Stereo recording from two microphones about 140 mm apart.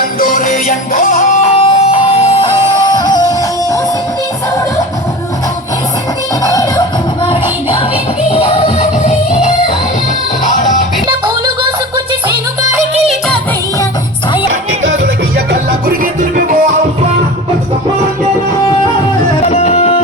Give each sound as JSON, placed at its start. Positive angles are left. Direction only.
{"t": 0.0, "sound": "music", "side_deg": 75}
{"t": 1.5, "sound": "music", "side_deg": 45}
{"t": 2.9, "sound": "music", "side_deg": 30}
{"t": 6.4, "sound": "music", "side_deg": 25}
{"t": 8.3, "sound": "music", "side_deg": 45}
{"t": 15.9, "sound": "music", "side_deg": -90}
{"t": 19.4, "sound": "music", "side_deg": 50}